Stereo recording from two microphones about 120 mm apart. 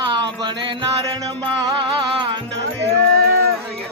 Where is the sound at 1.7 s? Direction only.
45° right (ahead or behind).